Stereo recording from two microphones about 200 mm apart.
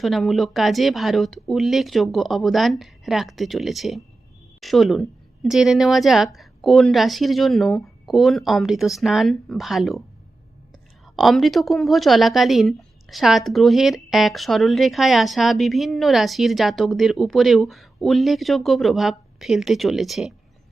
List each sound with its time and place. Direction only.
0.0 s a woman's voice: centre (ahead or behind)
11.0 s a woman's voice: centre (ahead or behind)